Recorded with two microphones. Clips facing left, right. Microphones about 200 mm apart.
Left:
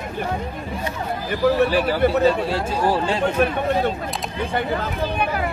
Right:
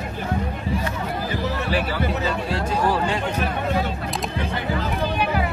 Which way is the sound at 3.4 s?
55° left (ahead or behind).